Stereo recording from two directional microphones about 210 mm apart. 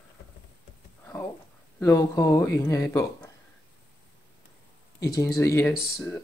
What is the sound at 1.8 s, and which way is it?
Speech, 15° left (ahead or behind).